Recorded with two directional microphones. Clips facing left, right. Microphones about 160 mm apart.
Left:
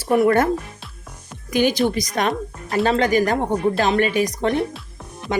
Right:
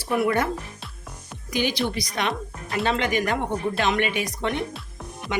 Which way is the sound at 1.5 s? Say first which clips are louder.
Left 7 dB; 45° left (ahead or behind).